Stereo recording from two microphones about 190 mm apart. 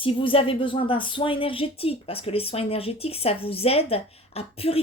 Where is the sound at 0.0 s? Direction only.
30° left (ahead or behind).